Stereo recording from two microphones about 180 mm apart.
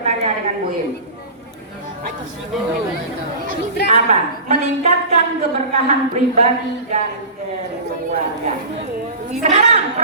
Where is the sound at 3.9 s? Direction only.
40° right (ahead or behind).